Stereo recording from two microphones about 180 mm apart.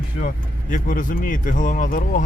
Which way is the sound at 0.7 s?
45° left (ahead or behind).